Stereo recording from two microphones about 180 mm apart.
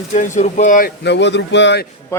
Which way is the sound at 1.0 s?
75° left (ahead or behind).